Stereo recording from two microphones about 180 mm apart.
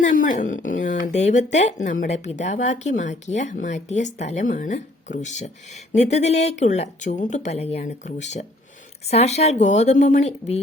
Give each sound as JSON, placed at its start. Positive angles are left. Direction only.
{"t": 0.1, "sound": "speech", "side_deg": 45}